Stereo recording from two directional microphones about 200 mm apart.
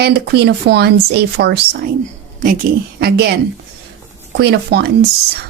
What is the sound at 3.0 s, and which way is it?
Speech, 55° right (ahead or behind).